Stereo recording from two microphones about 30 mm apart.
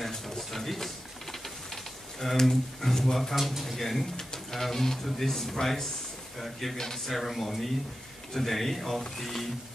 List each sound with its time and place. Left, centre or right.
0.0 s a sound: centre
2.3 s speech: centre
3.3 s speech: centre